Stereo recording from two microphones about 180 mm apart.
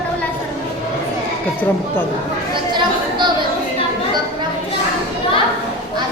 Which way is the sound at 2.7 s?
25° right (ahead or behind).